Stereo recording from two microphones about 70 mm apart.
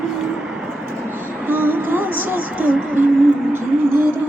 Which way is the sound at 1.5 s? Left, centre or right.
Right.